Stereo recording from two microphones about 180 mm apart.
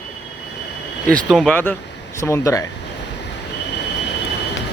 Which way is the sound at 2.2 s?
15° left (ahead or behind).